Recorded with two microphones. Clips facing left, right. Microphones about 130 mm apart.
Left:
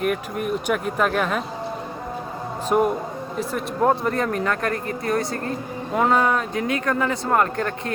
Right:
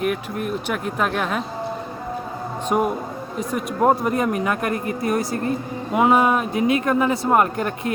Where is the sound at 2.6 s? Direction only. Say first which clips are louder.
Left 1 dB; centre (ahead or behind).